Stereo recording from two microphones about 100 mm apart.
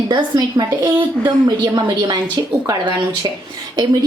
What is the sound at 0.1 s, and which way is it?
A woman's voice, 45° right (ahead or behind).